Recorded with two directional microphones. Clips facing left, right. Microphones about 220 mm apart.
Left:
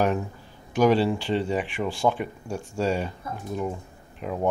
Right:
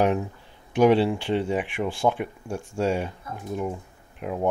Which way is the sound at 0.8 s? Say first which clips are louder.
Right 2 dB; 20° right (ahead or behind).